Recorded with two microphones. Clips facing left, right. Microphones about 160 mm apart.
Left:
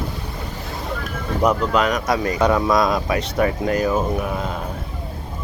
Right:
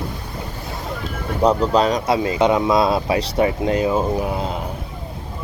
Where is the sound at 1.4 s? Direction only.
30° right (ahead or behind).